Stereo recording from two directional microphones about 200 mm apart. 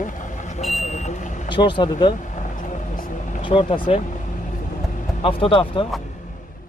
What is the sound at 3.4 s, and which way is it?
Speech, 25° left (ahead or behind).